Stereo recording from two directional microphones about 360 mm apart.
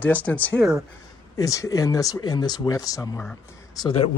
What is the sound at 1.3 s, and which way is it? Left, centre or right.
Speech, centre.